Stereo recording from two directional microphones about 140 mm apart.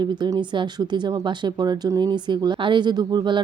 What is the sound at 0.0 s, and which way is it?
Speech, 30° right (ahead or behind).